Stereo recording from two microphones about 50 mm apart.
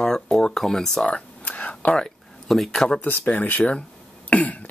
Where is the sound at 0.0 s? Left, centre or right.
Centre.